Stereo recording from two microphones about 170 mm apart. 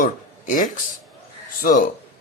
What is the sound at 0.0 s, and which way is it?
Speech, 50° left (ahead or behind).